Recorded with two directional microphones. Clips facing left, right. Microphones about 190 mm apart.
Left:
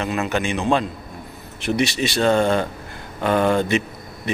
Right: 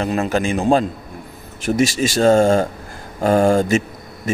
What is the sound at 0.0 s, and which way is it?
A man's voice, 35° right (ahead or behind).